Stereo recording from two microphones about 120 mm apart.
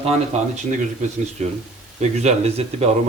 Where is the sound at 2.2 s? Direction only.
65° right (ahead or behind).